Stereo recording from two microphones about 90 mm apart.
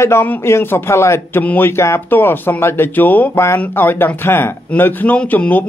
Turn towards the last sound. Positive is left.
turn(degrees=20)  # may be behind; listen again after turning